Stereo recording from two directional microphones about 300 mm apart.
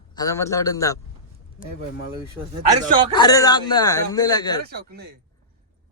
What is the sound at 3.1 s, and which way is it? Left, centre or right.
Speech, centre.